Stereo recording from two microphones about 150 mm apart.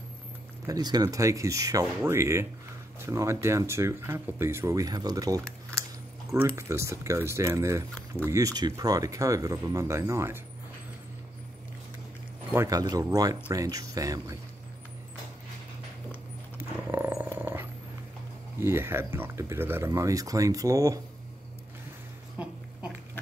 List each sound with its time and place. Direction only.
0.7 s speech: 25° right (ahead or behind)
12.4 s speech: 20° right (ahead or behind)
16.5 s dog: 15° right (ahead or behind)
18.6 s speech: 15° right (ahead or behind)
22.4 s a sound: 10° right (ahead or behind)